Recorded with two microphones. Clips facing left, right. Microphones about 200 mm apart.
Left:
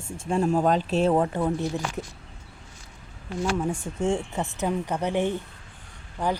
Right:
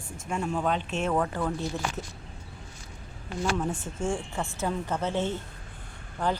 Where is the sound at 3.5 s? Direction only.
10° left (ahead or behind).